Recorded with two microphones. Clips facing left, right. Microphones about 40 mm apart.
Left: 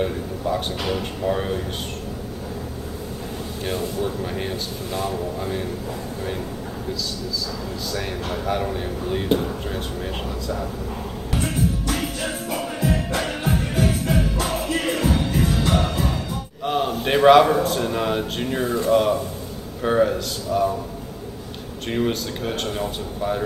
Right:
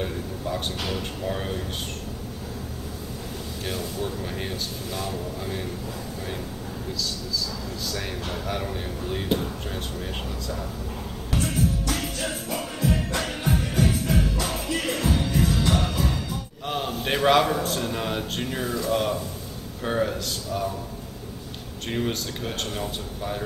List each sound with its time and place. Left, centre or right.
0.0 s speech: centre
3.6 s speech: centre
7.9 s speech: centre
11.3 s music: centre
16.6 s a man's voice: centre
18.6 s speech: left
18.9 s speech: centre
21.8 s speech: centre